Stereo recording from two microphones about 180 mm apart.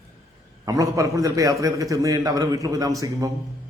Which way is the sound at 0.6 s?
20° right (ahead or behind).